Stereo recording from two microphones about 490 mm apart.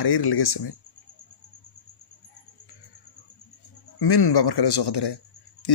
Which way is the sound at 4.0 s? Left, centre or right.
Left.